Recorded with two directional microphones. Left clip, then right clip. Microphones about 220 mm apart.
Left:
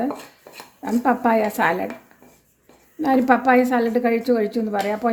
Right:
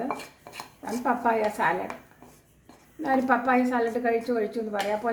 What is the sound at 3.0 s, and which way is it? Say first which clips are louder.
A woman's voice: left 6 dB; 50° left (ahead or behind).